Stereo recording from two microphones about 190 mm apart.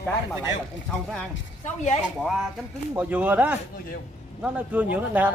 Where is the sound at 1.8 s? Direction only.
40° left (ahead or behind).